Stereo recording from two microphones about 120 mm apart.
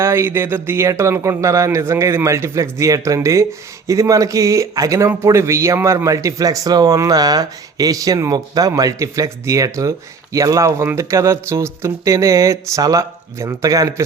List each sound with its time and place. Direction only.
0.0 s speech: 20° right (ahead or behind)